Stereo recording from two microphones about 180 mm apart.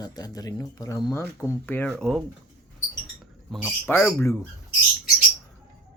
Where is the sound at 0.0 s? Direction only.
20° left (ahead or behind); by 2.2 s 5° left (ahead or behind).